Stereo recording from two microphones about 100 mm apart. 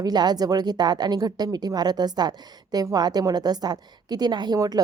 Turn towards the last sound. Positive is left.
turn(degrees=-40)  # may be behind; listen again after turning